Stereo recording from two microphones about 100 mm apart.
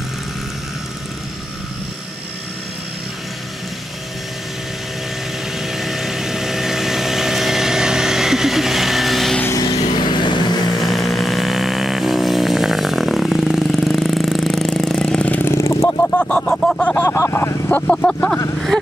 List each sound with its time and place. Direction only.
5.7 s vehicle: centre (ahead or behind)
9.5 s vehicle: 40° left (ahead or behind)
10.8 s vehicle: centre (ahead or behind); by 15.5 s 15° left (ahead or behind)
15.5 s a sound: 30° left (ahead or behind); by 16.8 s 5° left (ahead or behind)
16.9 s vehicle: 30° left (ahead or behind)
17.6 s a sound: 10° left (ahead or behind)